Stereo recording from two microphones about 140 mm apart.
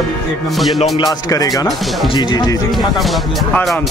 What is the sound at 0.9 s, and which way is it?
Speech, 30° left (ahead or behind).